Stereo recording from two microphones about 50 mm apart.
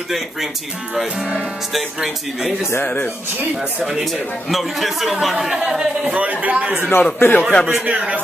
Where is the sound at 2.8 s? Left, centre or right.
Left.